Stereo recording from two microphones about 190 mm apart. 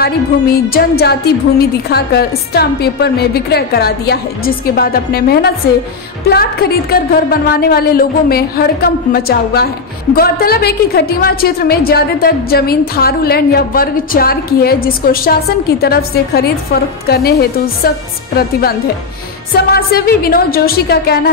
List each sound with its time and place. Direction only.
0.0 s a woman's voice: 55° left (ahead or behind)